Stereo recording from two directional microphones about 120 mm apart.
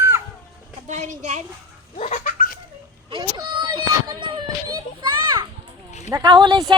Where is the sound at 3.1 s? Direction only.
40° right (ahead or behind).